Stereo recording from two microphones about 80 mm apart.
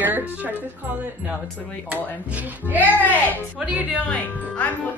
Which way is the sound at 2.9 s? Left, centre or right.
Left.